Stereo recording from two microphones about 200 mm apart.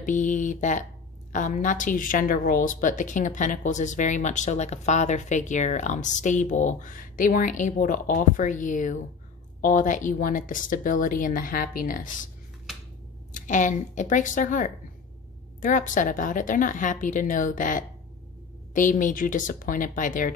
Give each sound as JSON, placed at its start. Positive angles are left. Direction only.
{"t": 0.0, "sound": "a woman's voice", "side_deg": 40}
{"t": 13.3, "sound": "a woman's voice", "side_deg": 40}